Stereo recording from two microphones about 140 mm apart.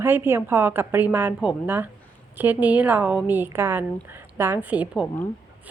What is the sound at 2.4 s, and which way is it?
Speech, 10° right (ahead or behind).